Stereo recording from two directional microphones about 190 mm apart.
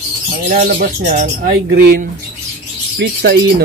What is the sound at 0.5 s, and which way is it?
Speech, 45° right (ahead or behind).